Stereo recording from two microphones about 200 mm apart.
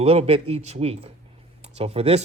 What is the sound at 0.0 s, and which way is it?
A man's voice, 30° right (ahead or behind).